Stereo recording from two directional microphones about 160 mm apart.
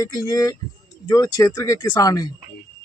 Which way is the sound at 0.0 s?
20° left (ahead or behind).